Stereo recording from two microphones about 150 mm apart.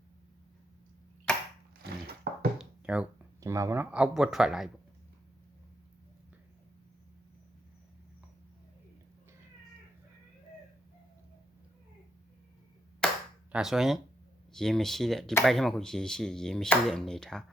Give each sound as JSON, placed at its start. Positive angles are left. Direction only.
{"t": 1.8, "sound": "a sound", "side_deg": -90}
{"t": 2.6, "sound": "a sound", "side_deg": -5}
{"t": 3.4, "sound": "speech", "side_deg": -20}
{"t": 3.9, "sound": "speech", "side_deg": -5}
{"t": 13.0, "sound": "clapping", "side_deg": 5}
{"t": 13.5, "sound": "speech", "side_deg": -5}